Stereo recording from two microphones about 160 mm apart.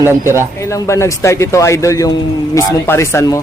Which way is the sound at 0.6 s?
20° left (ahead or behind).